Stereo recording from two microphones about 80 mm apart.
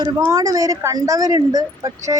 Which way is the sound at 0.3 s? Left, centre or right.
Right.